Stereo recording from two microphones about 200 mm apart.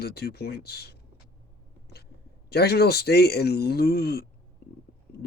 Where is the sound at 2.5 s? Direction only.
55° left (ahead or behind).